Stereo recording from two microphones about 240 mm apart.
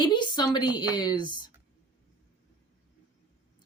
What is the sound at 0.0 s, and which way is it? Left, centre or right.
A woman's voice, centre.